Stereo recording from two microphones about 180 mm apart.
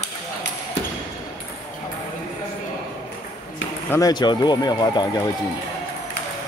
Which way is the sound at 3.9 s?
20° left (ahead or behind).